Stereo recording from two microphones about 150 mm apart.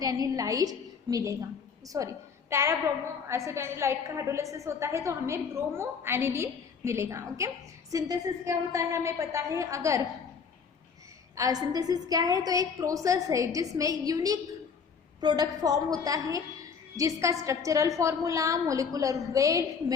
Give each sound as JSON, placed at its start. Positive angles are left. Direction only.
{"t": 0.0, "sound": "a woman's voice", "side_deg": -25}
{"t": 11.3, "sound": "a woman's voice", "side_deg": -25}